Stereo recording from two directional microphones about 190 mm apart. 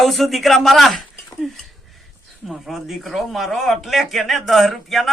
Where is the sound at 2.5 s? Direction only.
Centre (ahead or behind).